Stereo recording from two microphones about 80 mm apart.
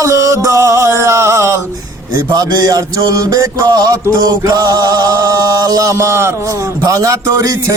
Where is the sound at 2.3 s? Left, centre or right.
Right.